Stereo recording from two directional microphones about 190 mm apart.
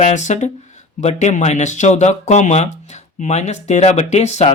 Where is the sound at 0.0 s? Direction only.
40° left (ahead or behind).